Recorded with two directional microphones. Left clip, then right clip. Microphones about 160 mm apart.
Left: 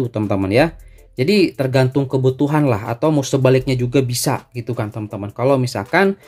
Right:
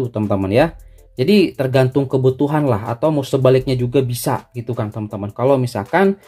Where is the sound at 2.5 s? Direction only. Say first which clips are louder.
Even; 15° left (ahead or behind).